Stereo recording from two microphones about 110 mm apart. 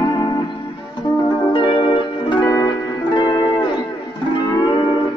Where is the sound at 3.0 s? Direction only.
45° left (ahead or behind).